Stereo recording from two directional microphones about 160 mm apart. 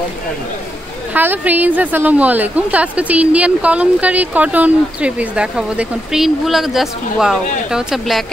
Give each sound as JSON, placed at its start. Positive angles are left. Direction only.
{"t": 1.1, "sound": "a woman's voice", "side_deg": -10}